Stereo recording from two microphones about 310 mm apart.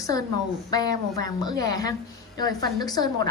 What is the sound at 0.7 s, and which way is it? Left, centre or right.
A woman's voice, centre.